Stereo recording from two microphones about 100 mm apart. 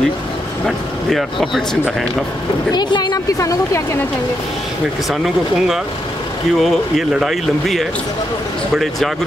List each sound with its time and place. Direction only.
0.7 s speech: centre (ahead or behind)
2.7 s speech: 45° left (ahead or behind)
3.3 s speech: 30° left (ahead or behind)
6.6 s speech: centre (ahead or behind)